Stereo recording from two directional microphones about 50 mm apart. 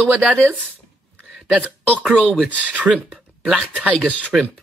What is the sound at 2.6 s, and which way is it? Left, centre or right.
Speech, right.